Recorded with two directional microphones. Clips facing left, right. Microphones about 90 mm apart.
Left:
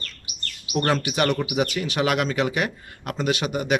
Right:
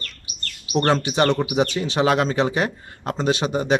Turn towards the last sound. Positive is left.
turn(degrees=-30)  # may be behind; listen again after turning